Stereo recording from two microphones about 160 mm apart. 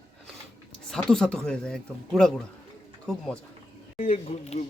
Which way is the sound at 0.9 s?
5° left (ahead or behind).